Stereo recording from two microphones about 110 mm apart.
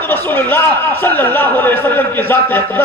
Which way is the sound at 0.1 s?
20° left (ahead or behind).